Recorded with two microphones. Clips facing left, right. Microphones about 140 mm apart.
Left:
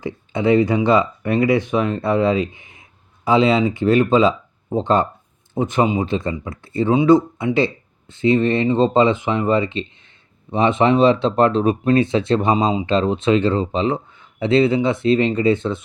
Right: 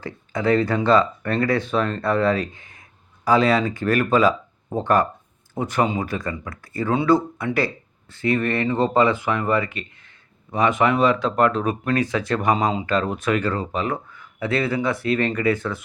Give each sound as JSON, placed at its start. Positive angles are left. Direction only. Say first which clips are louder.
{"t": 0.0, "sound": "speech", "louder": "left 4 dB", "side_deg": 20}